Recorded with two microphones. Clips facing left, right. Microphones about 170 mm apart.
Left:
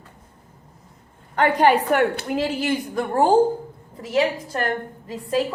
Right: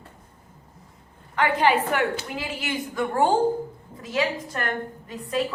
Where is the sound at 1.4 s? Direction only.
45° left (ahead or behind).